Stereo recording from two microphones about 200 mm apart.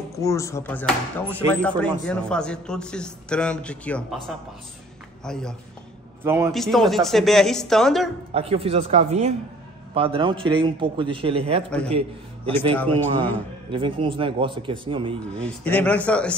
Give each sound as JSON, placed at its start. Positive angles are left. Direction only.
{"t": 0.2, "sound": "a man's voice", "side_deg": 15}
{"t": 6.2, "sound": "a man's voice", "side_deg": -10}
{"t": 6.5, "sound": "a man's voice", "side_deg": 0}
{"t": 8.3, "sound": "a man's voice", "side_deg": -30}
{"t": 12.7, "sound": "speech", "side_deg": 10}
{"t": 13.7, "sound": "a man's voice", "side_deg": -25}
{"t": 15.3, "sound": "a man's voice", "side_deg": 5}